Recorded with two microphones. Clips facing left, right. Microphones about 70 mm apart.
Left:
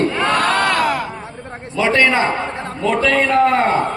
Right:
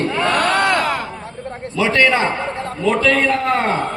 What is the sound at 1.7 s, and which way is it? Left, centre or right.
A man's voice, left.